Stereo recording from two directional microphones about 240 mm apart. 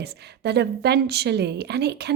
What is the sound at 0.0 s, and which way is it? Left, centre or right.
Speech, right.